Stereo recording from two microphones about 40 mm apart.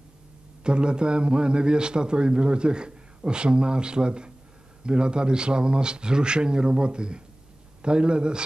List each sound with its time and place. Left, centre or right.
0.7 s a man's voice: right